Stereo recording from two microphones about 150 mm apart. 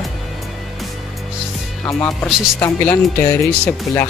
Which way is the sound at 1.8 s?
15° left (ahead or behind).